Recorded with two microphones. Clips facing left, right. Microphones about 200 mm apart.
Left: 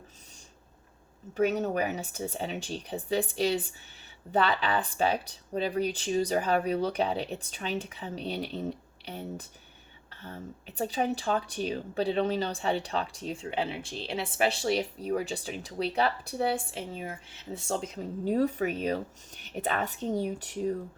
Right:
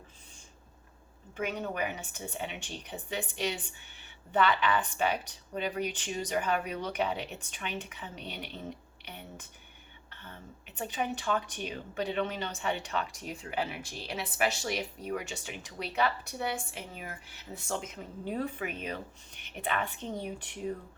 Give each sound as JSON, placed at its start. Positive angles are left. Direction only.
{"t": 1.4, "sound": "speech", "side_deg": 40}